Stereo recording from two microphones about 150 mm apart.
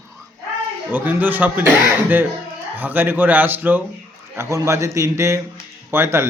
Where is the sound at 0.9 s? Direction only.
10° right (ahead or behind).